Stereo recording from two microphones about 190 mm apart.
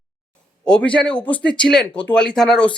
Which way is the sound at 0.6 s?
5° left (ahead or behind).